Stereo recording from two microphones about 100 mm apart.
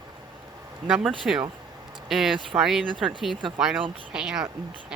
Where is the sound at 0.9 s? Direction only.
5° right (ahead or behind).